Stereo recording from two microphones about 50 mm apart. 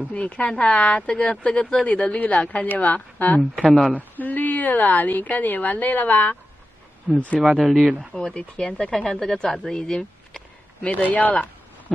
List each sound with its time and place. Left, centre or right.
0.1 s a woman's voice: left
7.3 s speech: centre
8.1 s speech: centre
9.7 s a sound: centre
11.0 s a woman's voice: left